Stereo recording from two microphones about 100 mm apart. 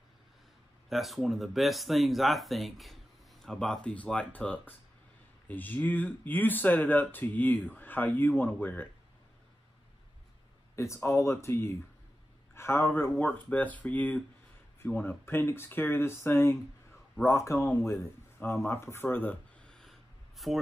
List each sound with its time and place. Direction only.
0.8 s speech: centre (ahead or behind); by 8.8 s 15° left (ahead or behind)
10.8 s speech: 30° left (ahead or behind)
13.1 s speech: 15° left (ahead or behind); by 17.6 s 30° left (ahead or behind)
18.4 s a sound: 25° left (ahead or behind); by 20.5 s centre (ahead or behind)